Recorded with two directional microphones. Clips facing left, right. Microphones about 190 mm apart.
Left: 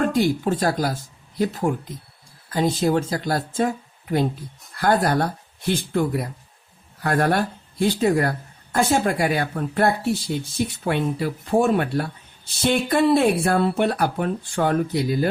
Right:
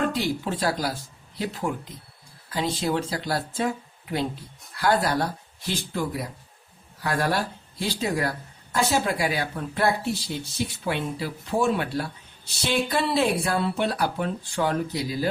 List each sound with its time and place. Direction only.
0.1 s speech: 50° left (ahead or behind)
4.7 s speech: 50° left (ahead or behind)